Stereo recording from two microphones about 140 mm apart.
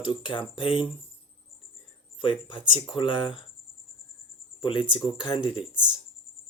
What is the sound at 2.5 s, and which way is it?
Speech, 35° left (ahead or behind).